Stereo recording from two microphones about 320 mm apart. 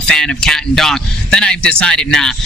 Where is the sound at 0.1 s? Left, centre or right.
Centre.